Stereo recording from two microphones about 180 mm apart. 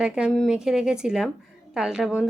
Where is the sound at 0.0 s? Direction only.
5° right (ahead or behind).